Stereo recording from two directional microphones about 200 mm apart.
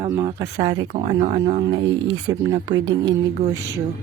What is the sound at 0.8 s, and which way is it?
Speech, 40° right (ahead or behind).